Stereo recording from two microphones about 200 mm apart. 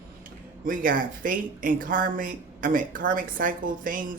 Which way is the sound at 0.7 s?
45° right (ahead or behind).